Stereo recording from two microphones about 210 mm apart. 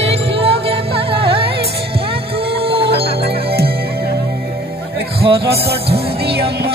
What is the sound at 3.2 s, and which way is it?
Music, 50° right (ahead or behind).